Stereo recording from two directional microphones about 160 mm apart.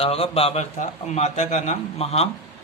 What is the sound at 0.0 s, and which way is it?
A man's voice, 35° left (ahead or behind).